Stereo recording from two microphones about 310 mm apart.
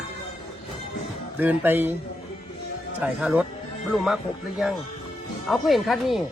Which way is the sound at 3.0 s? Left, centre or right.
Centre.